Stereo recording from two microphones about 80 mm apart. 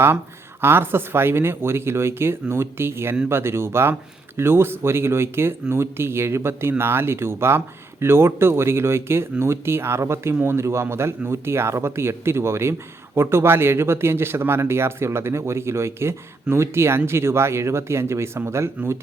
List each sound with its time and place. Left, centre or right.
0.6 s speech: right